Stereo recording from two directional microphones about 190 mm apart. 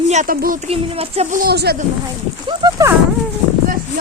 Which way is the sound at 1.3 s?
55° right (ahead or behind).